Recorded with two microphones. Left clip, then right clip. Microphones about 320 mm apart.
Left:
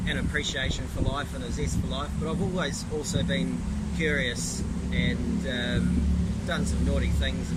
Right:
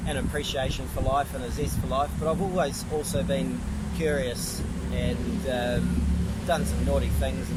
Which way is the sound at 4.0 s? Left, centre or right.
Centre.